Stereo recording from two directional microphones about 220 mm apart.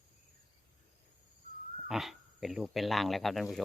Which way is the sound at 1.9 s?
Centre (ahead or behind).